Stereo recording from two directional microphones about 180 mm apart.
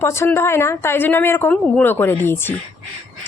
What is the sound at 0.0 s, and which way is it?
Speech, 15° left (ahead or behind).